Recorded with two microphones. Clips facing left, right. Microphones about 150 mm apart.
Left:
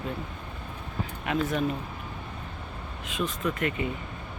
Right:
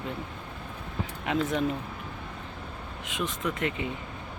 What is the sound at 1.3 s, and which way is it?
Speech, 20° right (ahead or behind).